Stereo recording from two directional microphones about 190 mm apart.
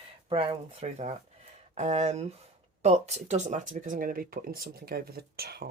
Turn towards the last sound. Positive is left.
turn(degrees=-55)  # may be behind; listen again after turning